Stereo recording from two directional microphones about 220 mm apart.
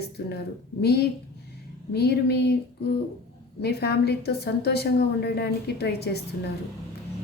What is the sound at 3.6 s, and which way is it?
Speech, 45° left (ahead or behind).